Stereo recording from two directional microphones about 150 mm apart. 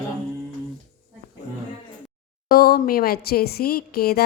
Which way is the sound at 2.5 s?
80° left.